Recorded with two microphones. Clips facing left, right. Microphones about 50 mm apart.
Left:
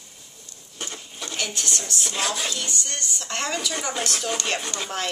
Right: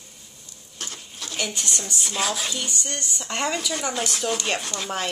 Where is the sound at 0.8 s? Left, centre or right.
Centre.